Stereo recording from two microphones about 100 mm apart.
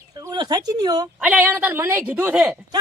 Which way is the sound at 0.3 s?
40° right (ahead or behind).